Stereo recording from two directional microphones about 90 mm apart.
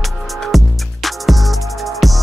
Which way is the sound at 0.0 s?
Centre (ahead or behind).